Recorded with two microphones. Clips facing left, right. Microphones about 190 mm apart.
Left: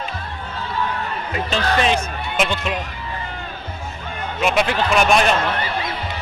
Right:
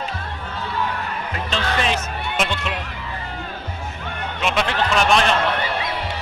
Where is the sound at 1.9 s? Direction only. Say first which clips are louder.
Left 3 dB; centre (ahead or behind).